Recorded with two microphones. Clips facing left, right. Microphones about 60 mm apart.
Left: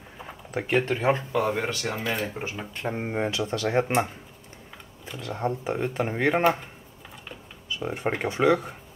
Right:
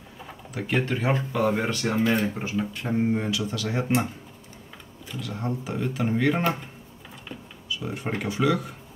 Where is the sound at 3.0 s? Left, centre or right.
Left.